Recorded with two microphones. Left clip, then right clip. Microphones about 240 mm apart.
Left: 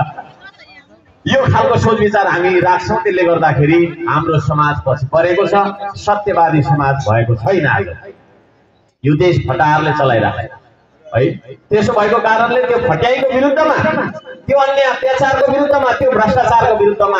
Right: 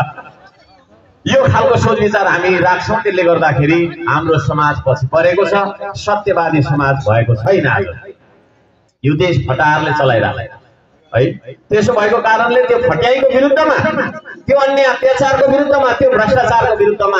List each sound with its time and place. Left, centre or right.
1.2 s a man's voice: right
9.0 s a man's voice: right
11.7 s a man's voice: right